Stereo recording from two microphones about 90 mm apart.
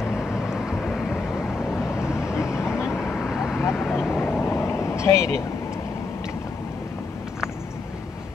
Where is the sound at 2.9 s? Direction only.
5° right (ahead or behind).